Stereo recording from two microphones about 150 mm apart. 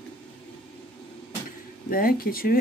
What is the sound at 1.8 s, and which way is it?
Speech, 75° left (ahead or behind).